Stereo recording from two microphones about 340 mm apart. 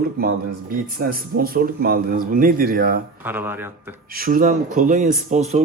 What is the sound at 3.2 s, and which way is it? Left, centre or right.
Speech, centre.